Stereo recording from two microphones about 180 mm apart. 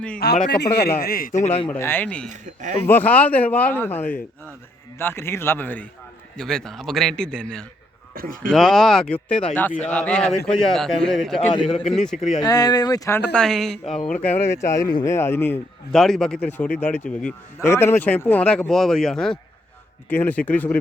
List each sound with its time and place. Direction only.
0.2 s a man's voice: 65° left (ahead or behind)
1.4 s speech: 35° left (ahead or behind)
1.7 s speech: 10° left (ahead or behind)
2.3 s speech: 45° right (ahead or behind)
2.8 s a man's voice: 10° left (ahead or behind)
8.1 s a man's voice: 55° right (ahead or behind)
8.4 s a man's voice: centre (ahead or behind)
11.7 s speech: 35° left (ahead or behind)
11.9 s a man's voice: 5° left (ahead or behind)
12.4 s speech: 20° left (ahead or behind)
13.3 s a man's voice: 5° left (ahead or behind)
14.3 s speech: 10° left (ahead or behind)